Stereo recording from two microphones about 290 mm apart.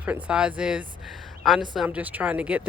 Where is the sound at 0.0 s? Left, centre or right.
Centre.